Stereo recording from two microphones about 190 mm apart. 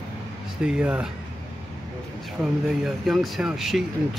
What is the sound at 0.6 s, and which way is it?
Speech, 5° right (ahead or behind).